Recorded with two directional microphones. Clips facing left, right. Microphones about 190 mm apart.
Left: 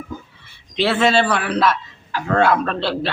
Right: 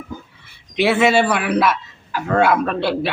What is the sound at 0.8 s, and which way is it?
A man's voice, 10° right (ahead or behind).